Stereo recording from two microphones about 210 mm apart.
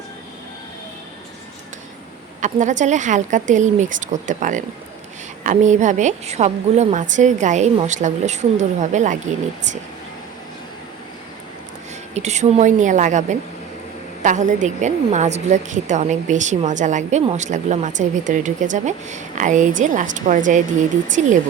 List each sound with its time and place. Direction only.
2.4 s a woman's voice: 35° right (ahead or behind)
12.1 s a woman's voice: 35° right (ahead or behind)